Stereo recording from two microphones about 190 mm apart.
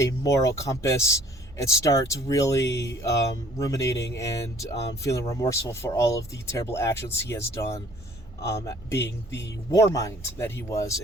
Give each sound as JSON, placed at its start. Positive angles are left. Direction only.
{"t": 0.0, "sound": "speech", "side_deg": 15}